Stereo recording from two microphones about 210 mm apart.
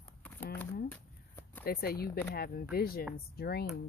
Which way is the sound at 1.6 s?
45° left (ahead or behind).